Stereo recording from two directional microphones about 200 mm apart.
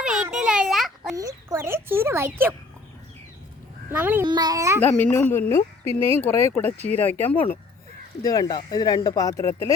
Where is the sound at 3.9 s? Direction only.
10° right (ahead or behind).